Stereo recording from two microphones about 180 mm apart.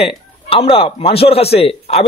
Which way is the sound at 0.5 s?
30° left (ahead or behind).